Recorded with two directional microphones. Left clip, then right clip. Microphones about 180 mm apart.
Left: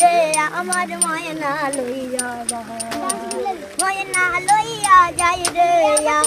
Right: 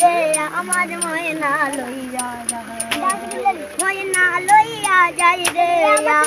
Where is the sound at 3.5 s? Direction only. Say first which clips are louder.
Right 9 dB; 30° right (ahead or behind).